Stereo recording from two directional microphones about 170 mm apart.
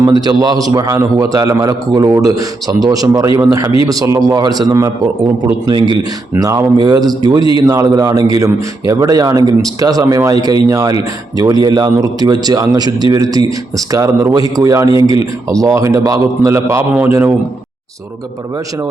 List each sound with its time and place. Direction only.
0.0 s a man's voice: 25° right (ahead or behind)